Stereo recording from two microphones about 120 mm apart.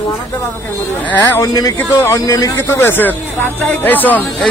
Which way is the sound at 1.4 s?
30° left (ahead or behind).